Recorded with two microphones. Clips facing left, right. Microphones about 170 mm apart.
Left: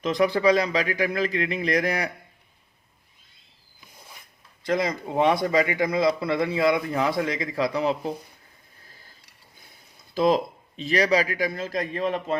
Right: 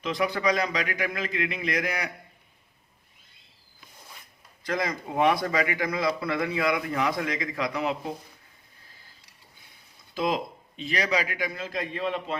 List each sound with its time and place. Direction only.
0.0 s a man's voice: 40° left (ahead or behind)
4.6 s a man's voice: 25° left (ahead or behind)
10.2 s a man's voice: 40° left (ahead or behind)